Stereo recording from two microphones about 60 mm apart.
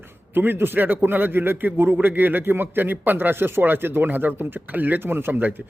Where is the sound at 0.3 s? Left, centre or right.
Right.